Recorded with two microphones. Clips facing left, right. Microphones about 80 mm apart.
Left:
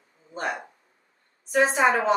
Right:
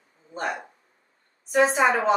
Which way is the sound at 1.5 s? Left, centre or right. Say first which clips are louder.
Right 1 dB; centre.